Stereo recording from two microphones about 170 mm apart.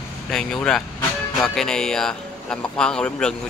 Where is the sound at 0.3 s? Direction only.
5° left (ahead or behind).